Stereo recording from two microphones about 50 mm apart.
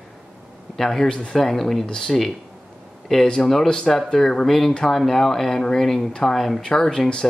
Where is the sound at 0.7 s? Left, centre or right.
Centre.